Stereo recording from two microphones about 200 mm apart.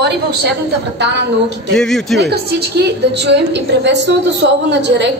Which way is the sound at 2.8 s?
60° right (ahead or behind).